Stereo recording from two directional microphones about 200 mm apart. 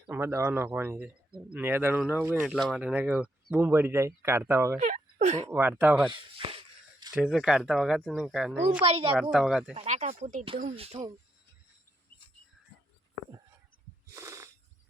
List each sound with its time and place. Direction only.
0.1 s a man's voice: 15° right (ahead or behind)
4.8 s speech: 35° right (ahead or behind)
5.5 s a man's voice: 10° right (ahead or behind)
6.1 s a sound: 25° right (ahead or behind)
7.1 s speech: centre (ahead or behind)
9.7 s speech: 35° right (ahead or behind)
14.1 s a sound: 15° right (ahead or behind)